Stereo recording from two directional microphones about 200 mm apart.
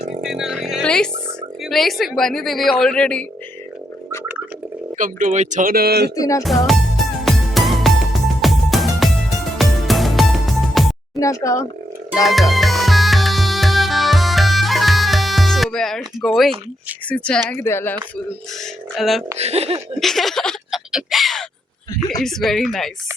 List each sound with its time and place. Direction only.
0.2 s a sound: 5° right (ahead or behind)
1.6 s speech: centre (ahead or behind)
4.9 s speech: 40° right (ahead or behind)
6.1 s speech: 15° left (ahead or behind)
6.4 s music: centre (ahead or behind)
11.2 s speech: 15° left (ahead or behind)
12.2 s music: centre (ahead or behind)
17.1 s speech: 5° left (ahead or behind)
18.6 s a sound: centre (ahead or behind)
19.4 s speech: 30° right (ahead or behind)
20.0 s a sound: centre (ahead or behind)
22.2 s speech: centre (ahead or behind)